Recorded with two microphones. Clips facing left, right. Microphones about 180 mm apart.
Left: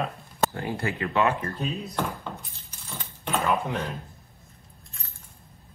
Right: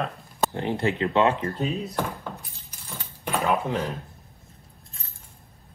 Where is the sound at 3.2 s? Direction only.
10° right (ahead or behind).